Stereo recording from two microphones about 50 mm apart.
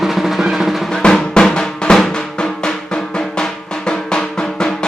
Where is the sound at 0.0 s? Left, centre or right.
Centre.